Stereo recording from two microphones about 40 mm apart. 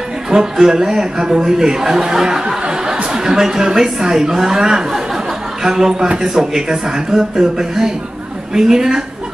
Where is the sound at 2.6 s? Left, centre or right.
Right.